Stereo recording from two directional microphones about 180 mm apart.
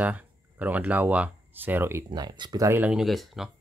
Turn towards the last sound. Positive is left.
turn(degrees=0)  # may be behind; listen again after turning